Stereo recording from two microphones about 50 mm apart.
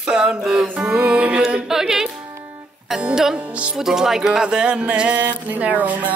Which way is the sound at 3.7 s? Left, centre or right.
Centre.